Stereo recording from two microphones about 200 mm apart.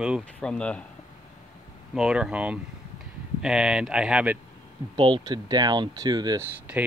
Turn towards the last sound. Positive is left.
turn(degrees=-10)  # may be behind; listen again after turning